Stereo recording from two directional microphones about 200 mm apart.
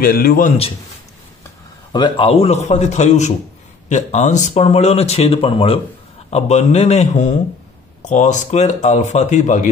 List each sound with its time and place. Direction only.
0.0 s a man's voice: 45° left (ahead or behind)
1.9 s speech: 20° left (ahead or behind); by 9.7 s 40° left (ahead or behind)